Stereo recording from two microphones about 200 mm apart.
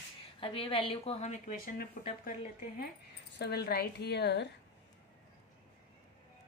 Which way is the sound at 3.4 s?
55° left (ahead or behind).